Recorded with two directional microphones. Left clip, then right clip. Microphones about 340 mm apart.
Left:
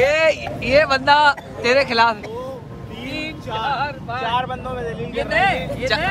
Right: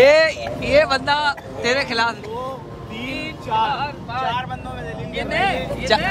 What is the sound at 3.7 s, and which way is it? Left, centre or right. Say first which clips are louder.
Speech: left 1 dB; centre.